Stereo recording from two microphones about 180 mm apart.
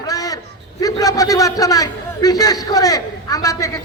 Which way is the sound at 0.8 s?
20° left (ahead or behind).